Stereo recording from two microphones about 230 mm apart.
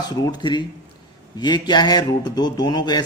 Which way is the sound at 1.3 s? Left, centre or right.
Centre.